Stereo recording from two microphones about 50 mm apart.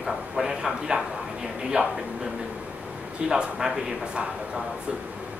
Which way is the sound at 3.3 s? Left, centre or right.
Centre.